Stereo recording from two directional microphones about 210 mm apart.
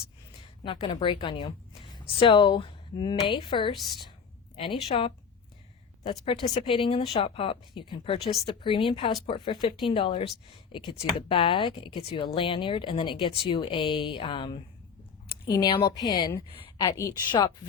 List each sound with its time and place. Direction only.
0.6 s a woman's voice: 25° left (ahead or behind)